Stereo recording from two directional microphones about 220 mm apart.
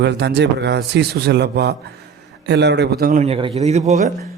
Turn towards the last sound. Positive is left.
turn(degrees=-30)  # may be behind; listen again after turning